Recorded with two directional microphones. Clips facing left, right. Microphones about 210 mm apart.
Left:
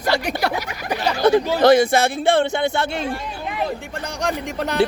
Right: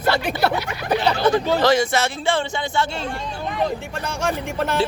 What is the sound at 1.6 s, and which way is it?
A man's voice, 55° left (ahead or behind).